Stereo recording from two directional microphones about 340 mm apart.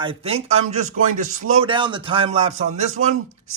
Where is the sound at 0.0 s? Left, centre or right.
Centre.